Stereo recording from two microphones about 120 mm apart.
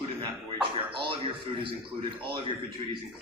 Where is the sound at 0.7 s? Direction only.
45° right (ahead or behind).